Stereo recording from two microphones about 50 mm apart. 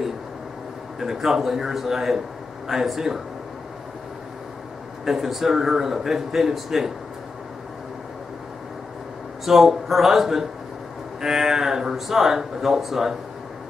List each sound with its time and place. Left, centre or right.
0.9 s speech: centre
5.0 s speech: centre
9.4 s speech: centre